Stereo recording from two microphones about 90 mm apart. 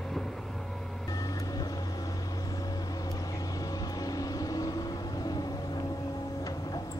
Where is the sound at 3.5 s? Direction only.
45° left (ahead or behind).